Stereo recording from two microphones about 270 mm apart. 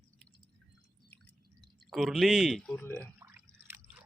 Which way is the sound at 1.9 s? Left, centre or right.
Centre.